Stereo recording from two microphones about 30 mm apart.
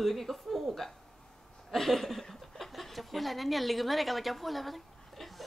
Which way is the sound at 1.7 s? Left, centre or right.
Centre.